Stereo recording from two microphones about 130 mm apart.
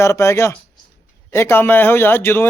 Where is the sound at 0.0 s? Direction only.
20° left (ahead or behind).